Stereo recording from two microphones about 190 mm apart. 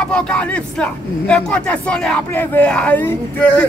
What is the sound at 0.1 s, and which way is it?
Speech, 5° left (ahead or behind).